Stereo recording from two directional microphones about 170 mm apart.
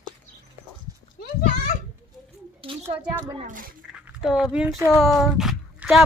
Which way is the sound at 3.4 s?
50° right (ahead or behind).